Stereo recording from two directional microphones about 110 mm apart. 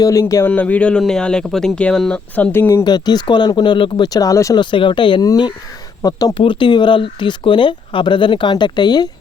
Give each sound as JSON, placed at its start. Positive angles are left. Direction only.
{"t": 0.0, "sound": "speech", "side_deg": 30}
{"t": 0.4, "sound": "speech", "side_deg": 15}
{"t": 2.8, "sound": "speech", "side_deg": 40}
{"t": 4.5, "sound": "speech", "side_deg": 45}
{"t": 6.3, "sound": "speech", "side_deg": 50}